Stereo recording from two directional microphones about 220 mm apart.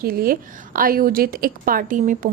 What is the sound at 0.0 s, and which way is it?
A woman's voice, 40° right (ahead or behind).